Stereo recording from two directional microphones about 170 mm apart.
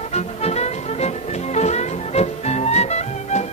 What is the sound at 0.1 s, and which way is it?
Music, 40° left (ahead or behind).